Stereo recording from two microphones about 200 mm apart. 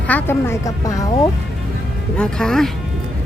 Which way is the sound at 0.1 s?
10° left (ahead or behind).